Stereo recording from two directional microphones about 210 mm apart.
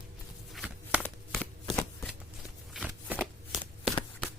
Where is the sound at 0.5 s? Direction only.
5° right (ahead or behind).